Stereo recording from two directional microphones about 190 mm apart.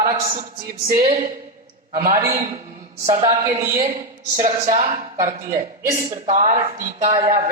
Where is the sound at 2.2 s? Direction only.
15° right (ahead or behind).